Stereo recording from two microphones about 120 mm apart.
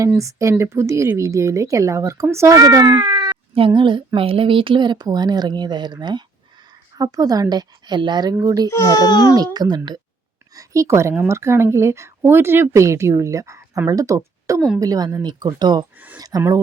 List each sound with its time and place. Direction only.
0.2 s speech: 25° right (ahead or behind)
8.7 s a child's voice: 30° left (ahead or behind)
9.3 s a woman's voice: 35° right (ahead or behind)